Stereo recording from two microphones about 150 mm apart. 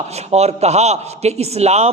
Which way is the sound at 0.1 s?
45° right (ahead or behind).